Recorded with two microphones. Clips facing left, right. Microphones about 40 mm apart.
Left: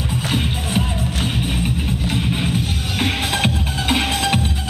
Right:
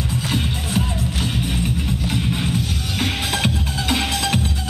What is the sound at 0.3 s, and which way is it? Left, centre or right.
Music, left.